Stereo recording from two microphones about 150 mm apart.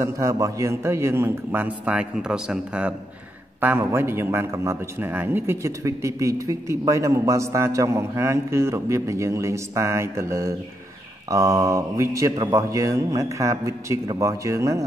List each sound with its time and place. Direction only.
0.0 s a man's voice: 20° right (ahead or behind)